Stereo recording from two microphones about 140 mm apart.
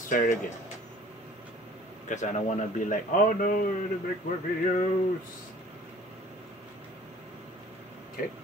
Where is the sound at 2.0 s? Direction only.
60° left (ahead or behind); by 3.7 s 85° left.